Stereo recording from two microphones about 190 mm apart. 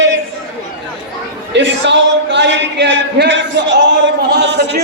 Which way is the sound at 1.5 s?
70° right (ahead or behind).